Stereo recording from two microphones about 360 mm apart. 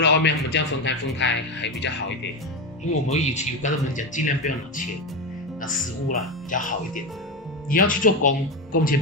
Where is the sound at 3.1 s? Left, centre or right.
Centre.